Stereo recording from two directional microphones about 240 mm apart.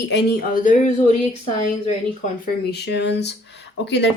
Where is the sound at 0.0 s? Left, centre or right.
Left.